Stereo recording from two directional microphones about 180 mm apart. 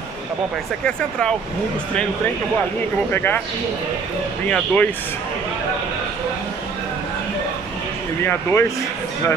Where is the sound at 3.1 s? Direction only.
10° left (ahead or behind).